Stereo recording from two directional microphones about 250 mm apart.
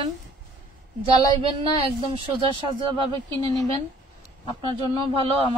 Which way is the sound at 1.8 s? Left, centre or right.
Right.